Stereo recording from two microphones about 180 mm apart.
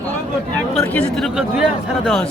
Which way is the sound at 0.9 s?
Centre (ahead or behind).